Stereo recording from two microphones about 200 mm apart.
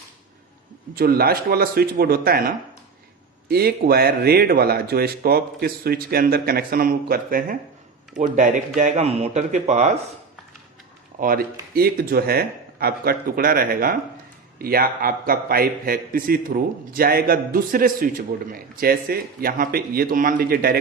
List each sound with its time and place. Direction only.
0.9 s a man's voice: 50° right (ahead or behind)
3.5 s a man's voice: 50° right (ahead or behind); by 9.9 s 35° right (ahead or behind)
11.2 s a man's voice: 45° right (ahead or behind)